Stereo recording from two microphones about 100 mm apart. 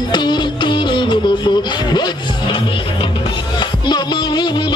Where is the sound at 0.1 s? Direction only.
45° left (ahead or behind).